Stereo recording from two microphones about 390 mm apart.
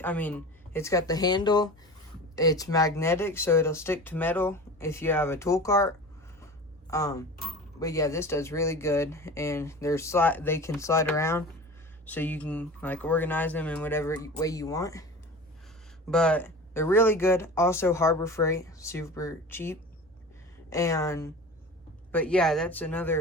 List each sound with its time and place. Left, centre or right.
0.0 s speech: centre
6.9 s speech: centre
16.0 s speech: centre